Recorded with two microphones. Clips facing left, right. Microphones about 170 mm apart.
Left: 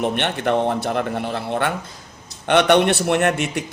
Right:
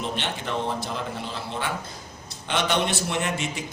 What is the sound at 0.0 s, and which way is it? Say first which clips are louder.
A man's voice: left 9 dB; 60° left (ahead or behind).